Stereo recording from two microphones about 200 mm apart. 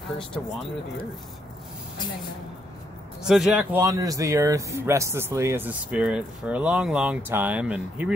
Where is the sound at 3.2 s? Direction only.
Centre (ahead or behind).